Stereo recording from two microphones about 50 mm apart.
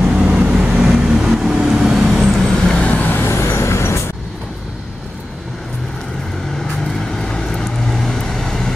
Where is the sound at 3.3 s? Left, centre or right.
Left.